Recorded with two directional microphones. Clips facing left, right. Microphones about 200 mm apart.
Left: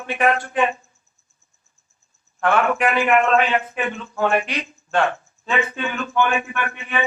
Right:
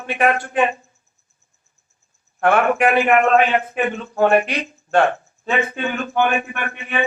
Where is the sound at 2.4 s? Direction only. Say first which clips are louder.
Right 3 dB; 50° right (ahead or behind).